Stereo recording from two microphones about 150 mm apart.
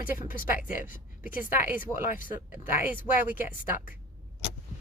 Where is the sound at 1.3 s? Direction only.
65° left (ahead or behind).